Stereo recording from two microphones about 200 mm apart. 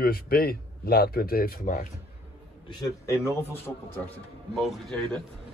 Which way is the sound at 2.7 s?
20° left (ahead or behind).